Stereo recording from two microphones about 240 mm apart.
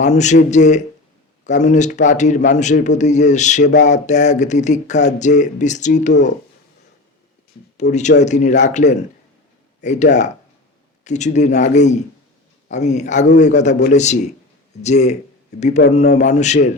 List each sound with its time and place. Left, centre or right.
0.0 s a man's voice: left
7.8 s a man's voice: left
15.8 s speech: left
16.1 s a man's voice: left